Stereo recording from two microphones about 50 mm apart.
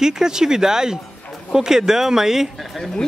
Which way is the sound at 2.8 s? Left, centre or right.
Centre.